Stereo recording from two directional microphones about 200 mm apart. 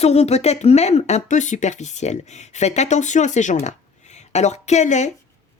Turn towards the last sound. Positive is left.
turn(degrees=35)  # may be behind; listen again after turning